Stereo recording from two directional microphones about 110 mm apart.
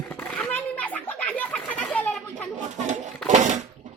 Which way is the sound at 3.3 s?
90° right.